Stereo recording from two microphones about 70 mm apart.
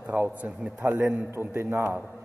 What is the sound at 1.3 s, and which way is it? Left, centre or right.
Speech, right.